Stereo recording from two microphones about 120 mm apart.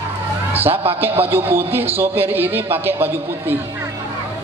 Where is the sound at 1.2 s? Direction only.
15° right (ahead or behind).